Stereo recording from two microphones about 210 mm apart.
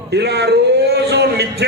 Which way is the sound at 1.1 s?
55° right (ahead or behind).